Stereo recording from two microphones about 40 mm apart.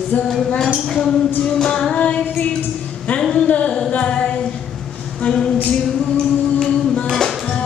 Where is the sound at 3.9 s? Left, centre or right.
Left.